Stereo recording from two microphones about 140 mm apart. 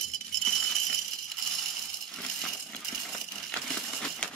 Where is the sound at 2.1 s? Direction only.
5° left (ahead or behind).